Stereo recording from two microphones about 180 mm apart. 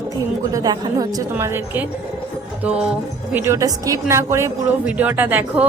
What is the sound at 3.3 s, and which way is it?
Speech, 15° right (ahead or behind).